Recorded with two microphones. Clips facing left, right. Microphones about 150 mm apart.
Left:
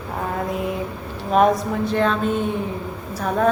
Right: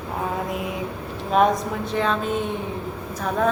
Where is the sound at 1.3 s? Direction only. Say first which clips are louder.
Left 2 dB; centre (ahead or behind).